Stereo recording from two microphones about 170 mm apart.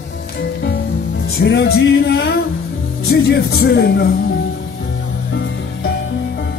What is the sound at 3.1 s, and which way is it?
Speech, 65° left (ahead or behind).